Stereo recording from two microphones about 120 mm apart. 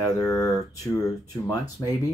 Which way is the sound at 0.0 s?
30° left (ahead or behind).